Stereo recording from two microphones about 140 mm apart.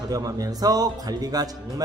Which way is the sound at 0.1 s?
25° right (ahead or behind).